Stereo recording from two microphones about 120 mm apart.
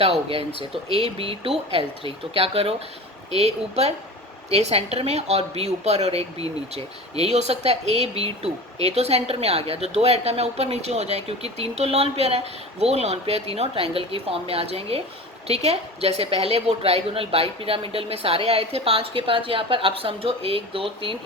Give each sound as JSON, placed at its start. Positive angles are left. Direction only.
{"t": 0.0, "sound": "a woman's voice", "side_deg": -55}